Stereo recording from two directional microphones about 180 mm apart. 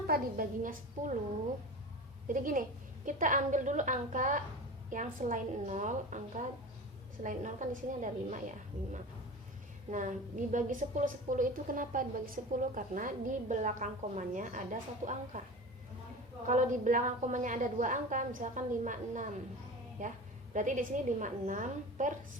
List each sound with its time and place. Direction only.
0.1 s a woman's voice: 50° right (ahead or behind)
2.2 s a woman's voice: 50° right (ahead or behind)
16.5 s a woman's voice: 45° right (ahead or behind)